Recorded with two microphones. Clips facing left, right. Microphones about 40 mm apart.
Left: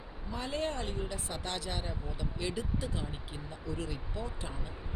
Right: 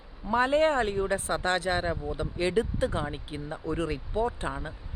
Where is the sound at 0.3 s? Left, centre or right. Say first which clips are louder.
Right 12 dB; right.